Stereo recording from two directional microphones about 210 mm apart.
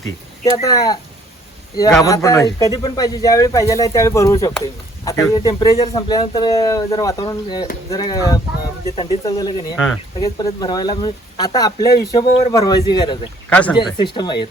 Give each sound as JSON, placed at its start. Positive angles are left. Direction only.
{"t": 0.5, "sound": "speech", "side_deg": 15}
{"t": 2.0, "sound": "speech", "side_deg": 15}
{"t": 9.7, "sound": "speech", "side_deg": 0}
{"t": 10.2, "sound": "speech", "side_deg": 20}
{"t": 13.5, "sound": "speech", "side_deg": 5}
{"t": 13.7, "sound": "speech", "side_deg": 20}